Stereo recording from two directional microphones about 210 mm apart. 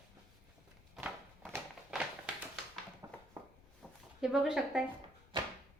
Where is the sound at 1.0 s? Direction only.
Centre (ahead or behind).